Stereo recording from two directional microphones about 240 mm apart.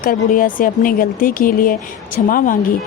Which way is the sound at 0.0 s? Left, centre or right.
Left.